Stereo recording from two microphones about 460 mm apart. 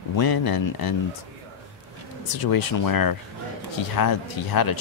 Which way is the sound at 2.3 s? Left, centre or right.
Left.